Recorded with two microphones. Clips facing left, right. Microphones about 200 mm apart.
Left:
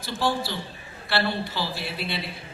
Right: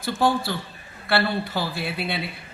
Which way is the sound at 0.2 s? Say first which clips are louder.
Right 3 dB; 55° right (ahead or behind).